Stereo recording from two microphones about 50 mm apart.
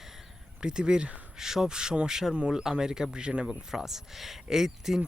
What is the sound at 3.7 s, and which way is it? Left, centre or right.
Speech, centre.